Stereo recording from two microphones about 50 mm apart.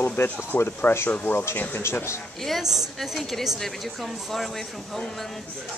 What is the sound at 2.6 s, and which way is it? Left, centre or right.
A woman's voice, centre.